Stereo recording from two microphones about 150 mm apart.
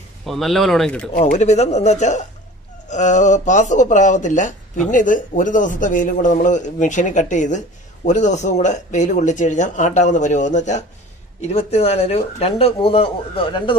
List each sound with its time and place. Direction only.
0.3 s speech: centre (ahead or behind)
1.1 s a man's voice: 50° left (ahead or behind); by 13.7 s 35° left (ahead or behind)